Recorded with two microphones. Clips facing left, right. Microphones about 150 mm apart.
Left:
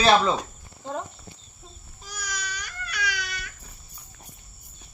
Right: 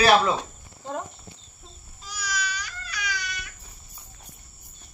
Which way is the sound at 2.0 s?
50° left (ahead or behind).